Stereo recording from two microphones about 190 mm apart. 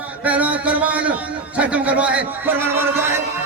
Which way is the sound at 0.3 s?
10° right (ahead or behind).